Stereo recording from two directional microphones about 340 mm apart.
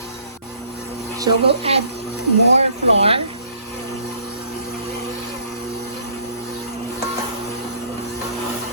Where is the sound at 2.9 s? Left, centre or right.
Centre.